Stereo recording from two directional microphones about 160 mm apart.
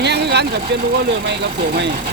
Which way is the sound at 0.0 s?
90° right.